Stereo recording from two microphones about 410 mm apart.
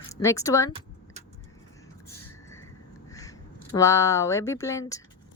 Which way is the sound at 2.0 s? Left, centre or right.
Centre.